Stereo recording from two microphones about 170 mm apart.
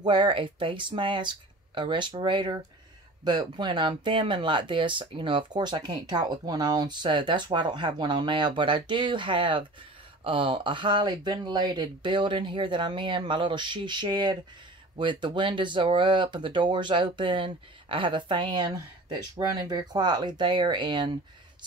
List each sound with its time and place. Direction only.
0.0 s speech: 30° right (ahead or behind)